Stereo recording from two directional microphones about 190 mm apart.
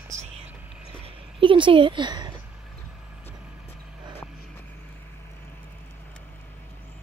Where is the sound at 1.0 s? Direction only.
25° right (ahead or behind).